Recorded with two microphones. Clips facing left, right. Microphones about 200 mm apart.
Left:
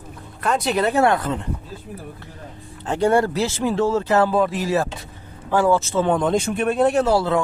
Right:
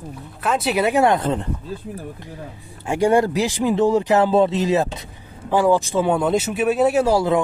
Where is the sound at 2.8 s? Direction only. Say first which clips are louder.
Right 1 dB; 10° right (ahead or behind).